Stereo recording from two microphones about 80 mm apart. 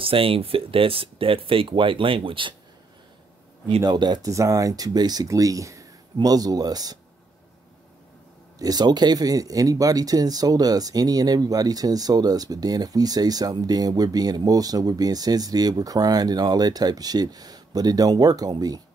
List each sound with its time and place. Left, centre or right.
1.0 s speech: right
3.8 s speech: right
4.2 s speech: right
5.3 s speech: right
8.5 s speech: right